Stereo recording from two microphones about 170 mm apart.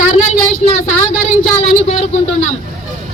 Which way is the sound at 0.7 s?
50° left (ahead or behind).